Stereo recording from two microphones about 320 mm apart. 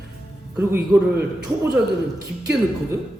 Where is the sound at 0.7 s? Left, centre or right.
Centre.